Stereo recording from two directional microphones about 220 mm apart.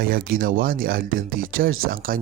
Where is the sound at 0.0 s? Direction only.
40° right (ahead or behind).